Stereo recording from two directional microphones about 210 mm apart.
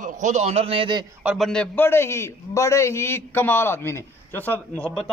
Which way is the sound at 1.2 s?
Centre (ahead or behind).